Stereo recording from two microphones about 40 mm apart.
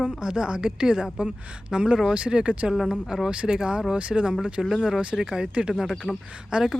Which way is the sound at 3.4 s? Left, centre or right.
Right.